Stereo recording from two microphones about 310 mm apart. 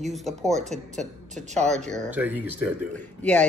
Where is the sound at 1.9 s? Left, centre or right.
Centre.